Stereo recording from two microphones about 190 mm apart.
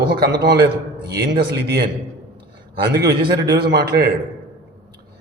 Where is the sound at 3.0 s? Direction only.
60° right (ahead or behind).